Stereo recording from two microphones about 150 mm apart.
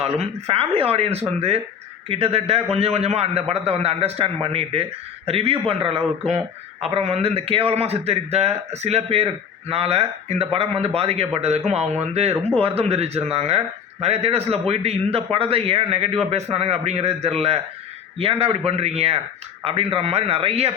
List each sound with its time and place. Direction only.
0.0 s a man's voice: 40° right (ahead or behind)